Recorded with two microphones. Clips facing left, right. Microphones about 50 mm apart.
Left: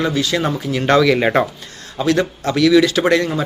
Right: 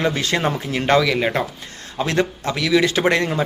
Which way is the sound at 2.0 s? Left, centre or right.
Right.